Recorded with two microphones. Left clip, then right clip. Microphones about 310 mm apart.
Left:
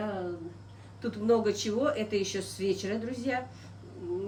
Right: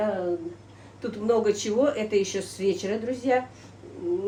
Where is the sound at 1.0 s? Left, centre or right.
Centre.